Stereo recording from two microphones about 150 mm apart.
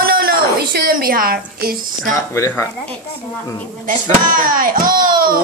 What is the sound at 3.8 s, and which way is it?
A child's voice, 70° right (ahead or behind).